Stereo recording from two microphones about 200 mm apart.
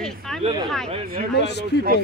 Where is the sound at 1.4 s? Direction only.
55° left (ahead or behind).